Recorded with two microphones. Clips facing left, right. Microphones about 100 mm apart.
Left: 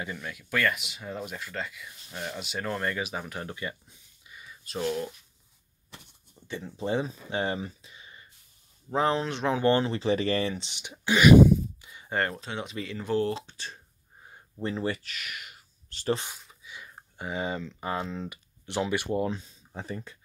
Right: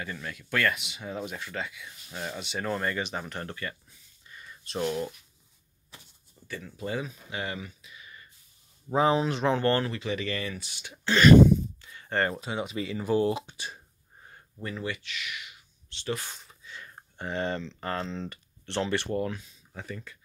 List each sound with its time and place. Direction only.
0.0 s speech: 10° left (ahead or behind)
3.5 s a sound: 15° left (ahead or behind); by 5.1 s centre (ahead or behind)
6.4 s speech: 25° left (ahead or behind)
8.9 s speech: 5° right (ahead or behind)
9.6 s speech: 20° left (ahead or behind)
9.9 s speech: 35° left (ahead or behind)
10.9 s a sound: 10° left (ahead or behind)
12.2 s speech: 5° right (ahead or behind)
14.6 s speech: 30° left (ahead or behind)
16.6 s speech: 10° left (ahead or behind)
19.1 s speech: 20° left (ahead or behind)
19.4 s speech: 30° left (ahead or behind)